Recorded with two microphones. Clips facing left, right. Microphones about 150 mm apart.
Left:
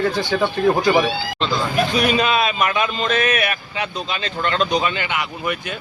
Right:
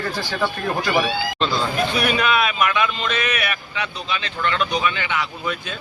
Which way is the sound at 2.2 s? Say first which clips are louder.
Left 1 dB; 30° left (ahead or behind).